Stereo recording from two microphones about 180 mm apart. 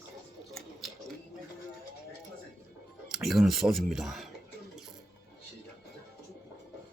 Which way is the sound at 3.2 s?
Centre (ahead or behind).